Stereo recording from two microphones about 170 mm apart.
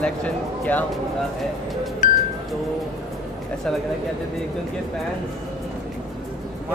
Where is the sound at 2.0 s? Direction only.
45° left (ahead or behind).